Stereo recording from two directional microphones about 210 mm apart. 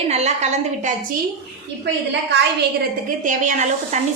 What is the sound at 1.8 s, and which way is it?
Speech, 55° right (ahead or behind).